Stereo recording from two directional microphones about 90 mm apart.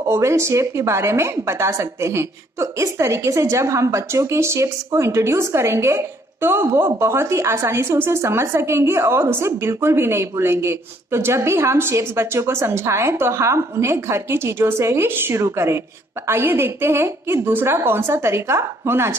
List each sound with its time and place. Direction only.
0.1 s a woman's voice: 30° right (ahead or behind)